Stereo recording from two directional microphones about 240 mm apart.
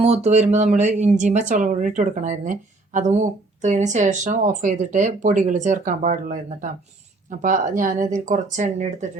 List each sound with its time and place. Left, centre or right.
0.0 s speech: right